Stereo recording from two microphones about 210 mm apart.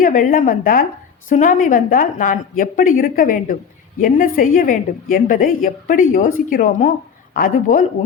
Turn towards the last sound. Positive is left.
turn(degrees=40)  # may be behind; listen again after turning